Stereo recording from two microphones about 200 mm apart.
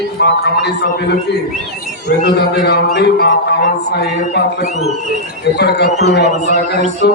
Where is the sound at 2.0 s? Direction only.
60° left (ahead or behind).